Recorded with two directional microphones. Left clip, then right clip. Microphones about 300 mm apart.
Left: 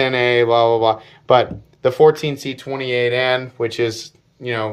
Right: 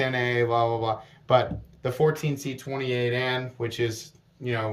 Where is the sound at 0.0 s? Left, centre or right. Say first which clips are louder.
Left 9 dB; centre.